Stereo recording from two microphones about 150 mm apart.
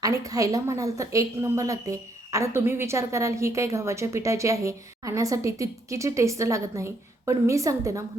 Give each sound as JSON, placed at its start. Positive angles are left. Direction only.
{"t": 0.0, "sound": "a woman's voice", "side_deg": -25}